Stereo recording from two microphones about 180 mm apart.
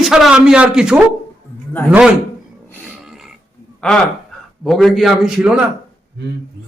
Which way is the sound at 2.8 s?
5° right (ahead or behind).